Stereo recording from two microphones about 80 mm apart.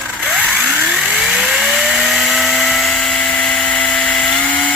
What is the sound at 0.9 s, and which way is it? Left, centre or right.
Chainsaw, centre.